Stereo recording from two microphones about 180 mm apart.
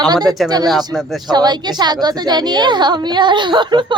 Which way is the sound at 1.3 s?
25° right (ahead or behind).